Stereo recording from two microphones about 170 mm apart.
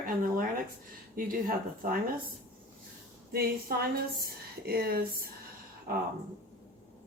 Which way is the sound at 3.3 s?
65° right (ahead or behind).